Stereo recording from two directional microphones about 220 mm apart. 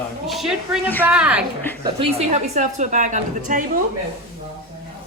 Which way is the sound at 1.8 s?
30° right (ahead or behind).